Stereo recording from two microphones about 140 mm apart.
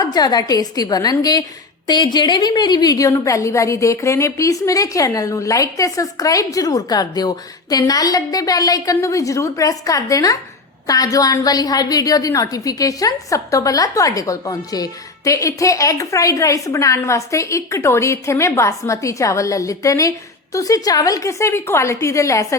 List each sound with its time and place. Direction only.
0.0 s a woman's voice: 30° left (ahead or behind)